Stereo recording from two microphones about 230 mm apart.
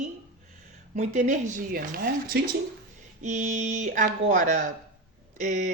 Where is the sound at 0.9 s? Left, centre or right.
Right.